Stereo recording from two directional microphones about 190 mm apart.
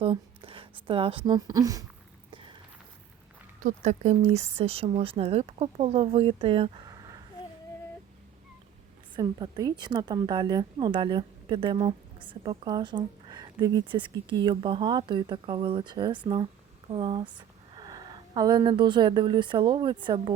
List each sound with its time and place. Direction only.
0.0 s speech: 30° right (ahead or behind)
2.3 s a sound: 25° right (ahead or behind)
3.6 s speech: 40° right (ahead or behind); by 7.2 s 20° right (ahead or behind)
9.1 s a woman's voice: 20° right (ahead or behind)